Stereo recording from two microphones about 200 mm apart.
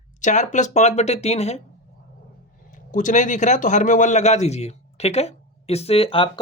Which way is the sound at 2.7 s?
40° left (ahead or behind).